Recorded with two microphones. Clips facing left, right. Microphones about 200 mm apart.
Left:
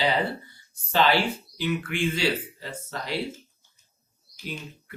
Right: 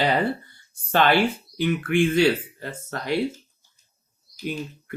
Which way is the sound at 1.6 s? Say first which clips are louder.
Right 7 dB; 55° right (ahead or behind).